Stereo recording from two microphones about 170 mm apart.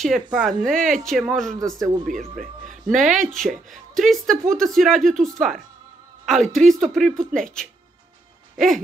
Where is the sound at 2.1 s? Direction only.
50° right (ahead or behind).